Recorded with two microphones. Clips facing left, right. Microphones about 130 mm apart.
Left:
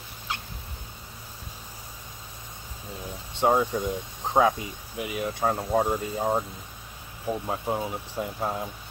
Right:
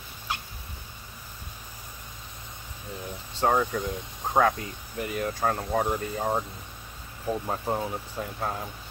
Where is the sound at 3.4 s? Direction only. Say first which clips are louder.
Left 2 dB; 10° left (ahead or behind).